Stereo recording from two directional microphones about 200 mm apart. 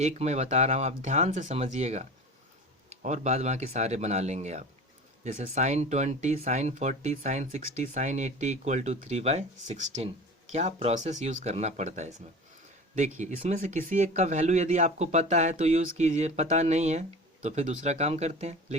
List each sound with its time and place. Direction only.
0.0 s speech: 35° right (ahead or behind)